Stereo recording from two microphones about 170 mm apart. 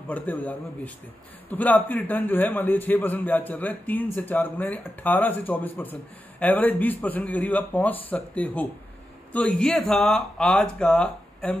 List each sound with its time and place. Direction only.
0.1 s a man's voice: 10° left (ahead or behind)